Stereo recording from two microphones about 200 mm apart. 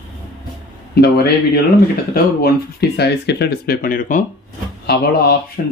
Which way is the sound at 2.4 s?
55° left (ahead or behind).